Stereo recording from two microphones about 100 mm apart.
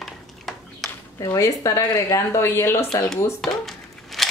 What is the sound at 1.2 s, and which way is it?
Speech, 30° left (ahead or behind).